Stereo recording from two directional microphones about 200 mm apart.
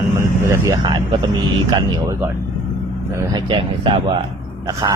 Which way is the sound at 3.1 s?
20° right (ahead or behind).